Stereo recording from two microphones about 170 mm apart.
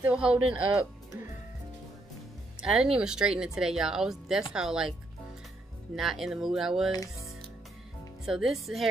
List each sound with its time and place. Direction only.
0.0 s speech: 5° right (ahead or behind)
2.6 s speech: 5° right (ahead or behind)
5.9 s speech: centre (ahead or behind)
6.9 s music: 20° left (ahead or behind)
8.3 s speech: centre (ahead or behind)